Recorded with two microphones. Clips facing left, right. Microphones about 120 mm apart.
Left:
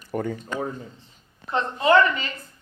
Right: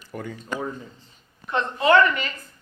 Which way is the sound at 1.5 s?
25° left (ahead or behind).